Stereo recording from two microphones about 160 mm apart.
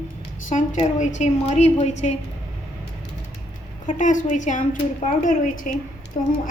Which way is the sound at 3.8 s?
55° left (ahead or behind).